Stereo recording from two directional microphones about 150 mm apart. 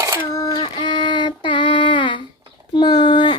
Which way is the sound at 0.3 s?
25° left (ahead or behind).